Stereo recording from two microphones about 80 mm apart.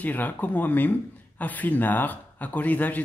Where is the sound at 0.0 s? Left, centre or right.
Left.